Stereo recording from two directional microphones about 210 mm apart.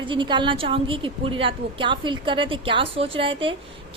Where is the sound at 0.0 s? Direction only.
25° right (ahead or behind).